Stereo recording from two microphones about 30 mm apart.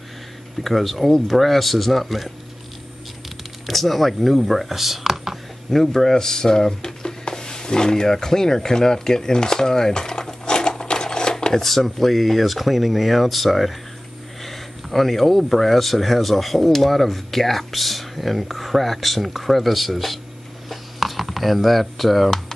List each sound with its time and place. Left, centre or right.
0.6 s speech: centre
3.6 s speech: centre
5.7 s speech: centre
11.7 s speech: centre
20.7 s a sound: centre